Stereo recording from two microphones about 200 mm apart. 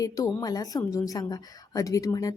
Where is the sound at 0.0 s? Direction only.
15° left (ahead or behind).